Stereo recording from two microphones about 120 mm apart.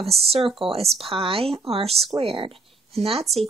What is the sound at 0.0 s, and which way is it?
Speech, 55° right (ahead or behind).